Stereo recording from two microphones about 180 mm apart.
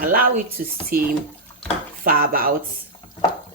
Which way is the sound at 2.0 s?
55° right (ahead or behind).